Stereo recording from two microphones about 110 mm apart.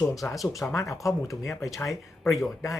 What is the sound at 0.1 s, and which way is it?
Speech, 30° left (ahead or behind).